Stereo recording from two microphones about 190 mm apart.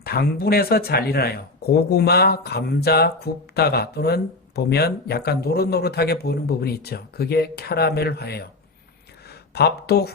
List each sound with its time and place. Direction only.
0.0 s speech: 55° left (ahead or behind)
9.6 s speech: 55° left (ahead or behind)